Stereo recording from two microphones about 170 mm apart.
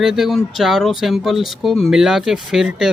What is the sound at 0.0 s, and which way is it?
Speech, centre (ahead or behind).